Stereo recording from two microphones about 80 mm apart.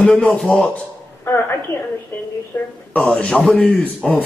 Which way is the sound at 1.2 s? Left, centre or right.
Left.